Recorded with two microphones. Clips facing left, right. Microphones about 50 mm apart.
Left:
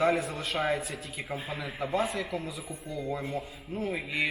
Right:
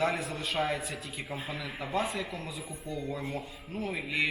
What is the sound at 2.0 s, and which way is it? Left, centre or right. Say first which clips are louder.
Speech: left 2 dB; centre.